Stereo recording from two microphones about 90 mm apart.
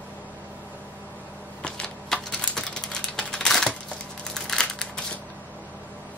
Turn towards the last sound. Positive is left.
turn(degrees=10)  # may be behind; listen again after turning